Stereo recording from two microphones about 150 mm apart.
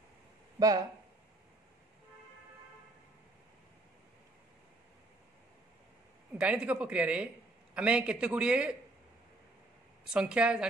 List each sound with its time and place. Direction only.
0.6 s speech: 25° right (ahead or behind)
6.3 s a man's voice: 5° right (ahead or behind)
10.1 s a man's voice: 5° right (ahead or behind)